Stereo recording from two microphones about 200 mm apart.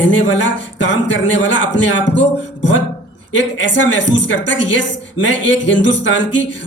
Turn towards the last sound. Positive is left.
turn(degrees=65)  # may be behind; listen again after turning